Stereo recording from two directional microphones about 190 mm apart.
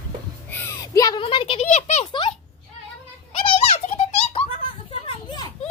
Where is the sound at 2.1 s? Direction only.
25° left (ahead or behind).